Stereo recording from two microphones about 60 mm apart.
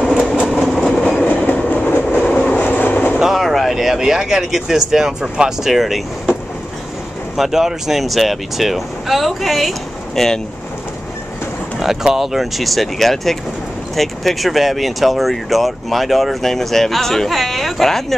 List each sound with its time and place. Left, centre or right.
0.0 s train: centre
0.5 s train: centre
1.0 s train: centre
2.5 s train: left
3.2 s speech: centre
7.3 s speech: centre
11.8 s speech: centre